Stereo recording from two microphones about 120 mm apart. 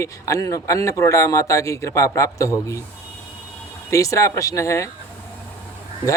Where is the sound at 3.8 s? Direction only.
25° left (ahead or behind).